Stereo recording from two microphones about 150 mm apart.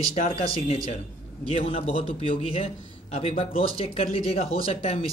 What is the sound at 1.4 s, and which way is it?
A man's voice, 45° left (ahead or behind).